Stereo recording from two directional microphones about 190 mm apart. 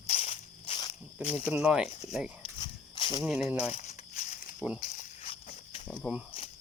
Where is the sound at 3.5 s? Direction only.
10° right (ahead or behind).